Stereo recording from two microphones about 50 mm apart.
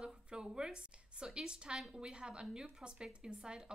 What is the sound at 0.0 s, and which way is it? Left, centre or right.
A woman's voice, centre.